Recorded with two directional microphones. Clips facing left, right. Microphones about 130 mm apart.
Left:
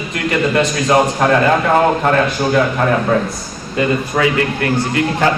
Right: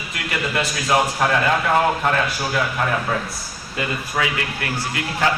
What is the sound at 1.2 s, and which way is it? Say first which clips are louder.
A man's voice: left 6 dB; 45° left (ahead or behind).